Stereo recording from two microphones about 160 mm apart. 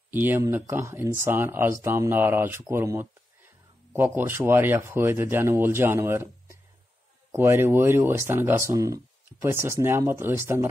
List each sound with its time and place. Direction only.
0.1 s speech: 10° right (ahead or behind)